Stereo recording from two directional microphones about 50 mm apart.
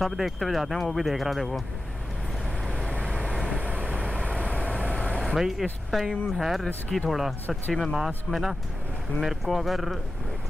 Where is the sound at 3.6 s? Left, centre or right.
Right.